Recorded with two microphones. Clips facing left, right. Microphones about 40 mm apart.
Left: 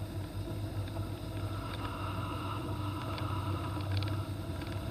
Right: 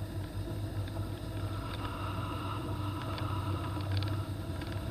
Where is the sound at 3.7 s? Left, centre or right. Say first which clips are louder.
Even; left.